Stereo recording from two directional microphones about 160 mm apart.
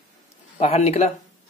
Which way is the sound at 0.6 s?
40° left (ahead or behind).